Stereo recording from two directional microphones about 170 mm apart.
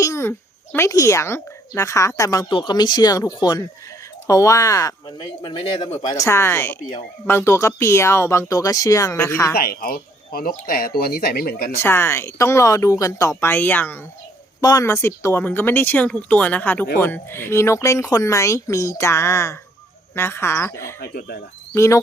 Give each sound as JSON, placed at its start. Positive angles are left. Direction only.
{"t": 0.0, "sound": "speech", "side_deg": 15}
{"t": 6.1, "sound": "speech", "side_deg": 15}
{"t": 9.6, "sound": "speech", "side_deg": 60}
{"t": 11.8, "sound": "speech", "side_deg": 15}
{"t": 21.0, "sound": "speech", "side_deg": 65}
{"t": 21.8, "sound": "speech", "side_deg": 15}